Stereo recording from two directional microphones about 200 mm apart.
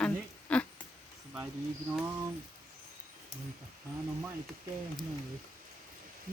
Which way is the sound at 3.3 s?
35° right (ahead or behind).